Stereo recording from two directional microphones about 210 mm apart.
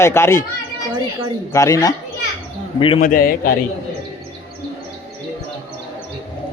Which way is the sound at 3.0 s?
40° left (ahead or behind).